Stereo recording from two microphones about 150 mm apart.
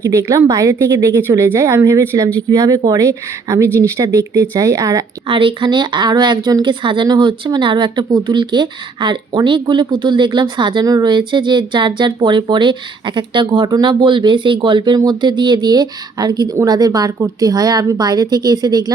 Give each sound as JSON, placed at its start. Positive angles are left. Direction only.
{"t": 0.0, "sound": "speech", "side_deg": -20}
{"t": 5.3, "sound": "speech", "side_deg": -35}